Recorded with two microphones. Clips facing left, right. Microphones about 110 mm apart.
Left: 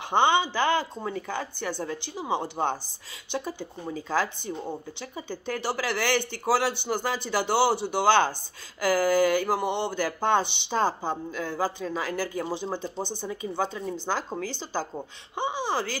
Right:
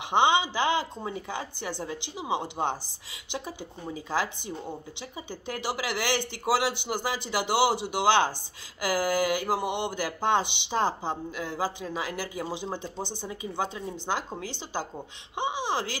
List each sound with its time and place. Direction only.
0.1 s speech: 15° right (ahead or behind)
12.8 s speech: 15° left (ahead or behind)
13.2 s speech: 15° right (ahead or behind)